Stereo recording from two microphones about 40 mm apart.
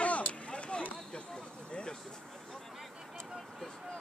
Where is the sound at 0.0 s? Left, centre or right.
Left.